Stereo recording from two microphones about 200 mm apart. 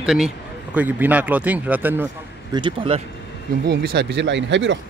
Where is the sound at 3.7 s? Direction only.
55° right (ahead or behind).